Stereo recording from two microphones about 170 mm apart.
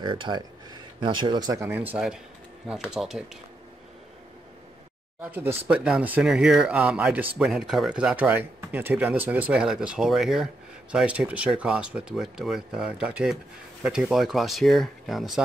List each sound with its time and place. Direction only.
0.0 s speech: 30° right (ahead or behind); by 3.3 s 5° right (ahead or behind)
5.2 s speech: 10° right (ahead or behind)